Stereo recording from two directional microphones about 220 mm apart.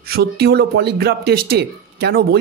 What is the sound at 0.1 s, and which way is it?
Speech, 45° right (ahead or behind).